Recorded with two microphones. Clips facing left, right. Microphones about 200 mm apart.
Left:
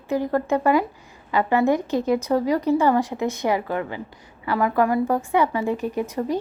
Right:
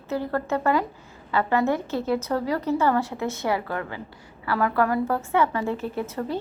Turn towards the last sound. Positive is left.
turn(degrees=15)  # may be behind; listen again after turning